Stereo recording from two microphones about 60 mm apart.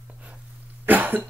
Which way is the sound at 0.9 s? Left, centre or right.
Right.